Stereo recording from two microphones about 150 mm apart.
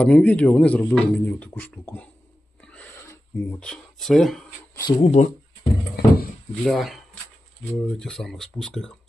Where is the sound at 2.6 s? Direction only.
5° left (ahead or behind).